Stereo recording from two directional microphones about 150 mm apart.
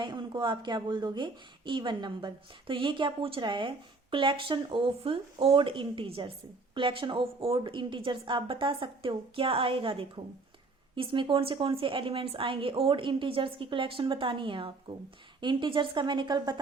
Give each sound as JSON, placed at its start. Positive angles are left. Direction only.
{"t": 0.0, "sound": "a woman's voice", "side_deg": -30}